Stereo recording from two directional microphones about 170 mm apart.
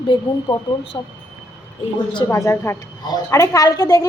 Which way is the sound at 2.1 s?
20° left (ahead or behind).